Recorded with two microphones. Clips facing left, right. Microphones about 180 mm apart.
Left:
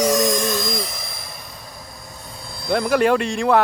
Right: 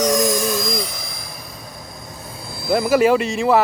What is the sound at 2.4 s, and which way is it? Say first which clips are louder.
Speech: right 2 dB; 5° right (ahead or behind).